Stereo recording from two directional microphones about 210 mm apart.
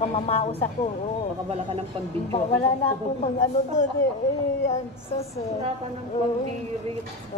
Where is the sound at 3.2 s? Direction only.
35° left (ahead or behind).